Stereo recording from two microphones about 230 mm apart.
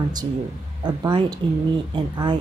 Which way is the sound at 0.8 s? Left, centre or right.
Centre.